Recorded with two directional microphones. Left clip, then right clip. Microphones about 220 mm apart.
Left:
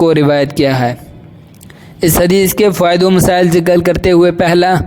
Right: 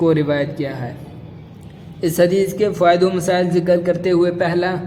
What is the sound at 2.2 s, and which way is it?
A man's voice, 45° left (ahead or behind).